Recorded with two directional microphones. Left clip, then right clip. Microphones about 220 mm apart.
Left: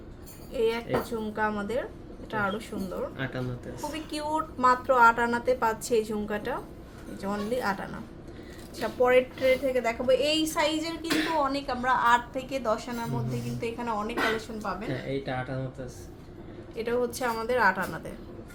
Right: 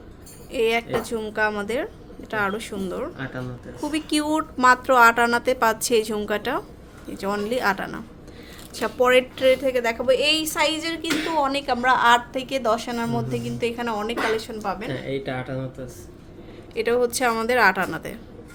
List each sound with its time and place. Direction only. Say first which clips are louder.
0.5 s a woman's voice: right 5 dB; 50° right (ahead or behind)
3.2 s a woman's voice: right 1 dB; centre (ahead or behind)
3.9 s a woman's voice: right 8 dB; 50° right (ahead or behind)
16.7 s a woman's voice: right 7 dB; 50° right (ahead or behind)